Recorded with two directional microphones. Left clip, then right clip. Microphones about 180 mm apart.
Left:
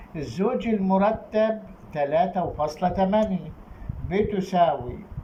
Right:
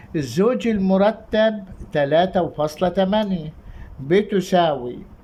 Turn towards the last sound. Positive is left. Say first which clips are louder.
# right 3 dB
turn(degrees=-55)  # may be behind; listen again after turning